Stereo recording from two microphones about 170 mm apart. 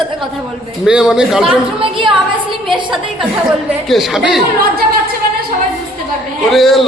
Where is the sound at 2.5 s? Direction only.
30° right (ahead or behind).